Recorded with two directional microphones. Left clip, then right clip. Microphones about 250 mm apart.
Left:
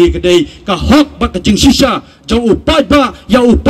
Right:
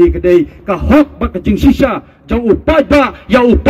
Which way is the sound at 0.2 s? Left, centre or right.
Left.